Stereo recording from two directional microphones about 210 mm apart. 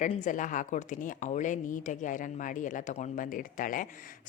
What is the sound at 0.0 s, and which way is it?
A woman's voice, 35° left (ahead or behind).